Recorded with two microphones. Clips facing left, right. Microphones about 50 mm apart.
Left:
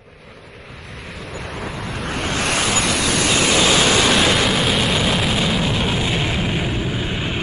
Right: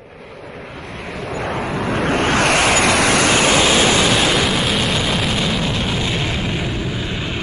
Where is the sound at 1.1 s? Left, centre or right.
Right.